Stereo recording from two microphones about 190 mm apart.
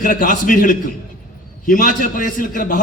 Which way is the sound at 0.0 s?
45° left (ahead or behind).